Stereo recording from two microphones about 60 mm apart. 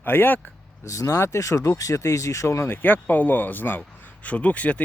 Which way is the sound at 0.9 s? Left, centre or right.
Left.